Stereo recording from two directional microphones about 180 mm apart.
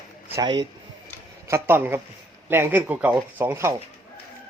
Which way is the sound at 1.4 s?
15° right (ahead or behind).